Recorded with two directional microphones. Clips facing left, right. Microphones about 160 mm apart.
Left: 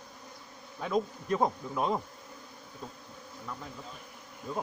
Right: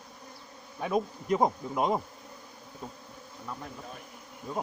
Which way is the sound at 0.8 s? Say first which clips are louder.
Right 1 dB; 15° right (ahead or behind).